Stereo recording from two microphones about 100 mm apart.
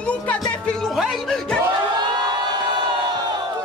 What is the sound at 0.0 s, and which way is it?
Music, 10° left (ahead or behind).